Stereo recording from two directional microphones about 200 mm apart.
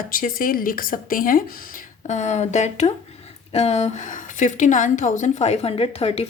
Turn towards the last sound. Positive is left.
turn(degrees=30)  # may be behind; listen again after turning